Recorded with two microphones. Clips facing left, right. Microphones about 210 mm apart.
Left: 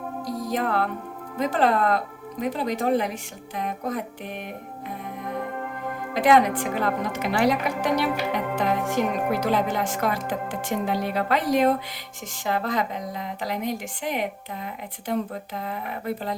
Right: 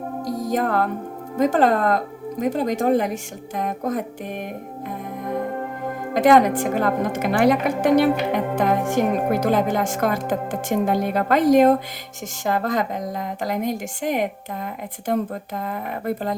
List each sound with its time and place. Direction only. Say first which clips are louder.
0.3 s music: right 4 dB; 45° right (ahead or behind)
1.4 s a woman's voice: right 4 dB; 45° right (ahead or behind)
6.1 s a woman's voice: right 4 dB; 45° right (ahead or behind)